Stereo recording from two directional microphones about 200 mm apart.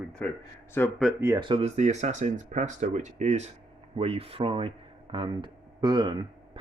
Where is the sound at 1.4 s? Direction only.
30° right (ahead or behind).